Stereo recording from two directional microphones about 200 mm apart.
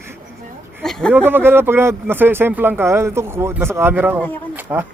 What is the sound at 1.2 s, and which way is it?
A man's voice, 10° right (ahead or behind).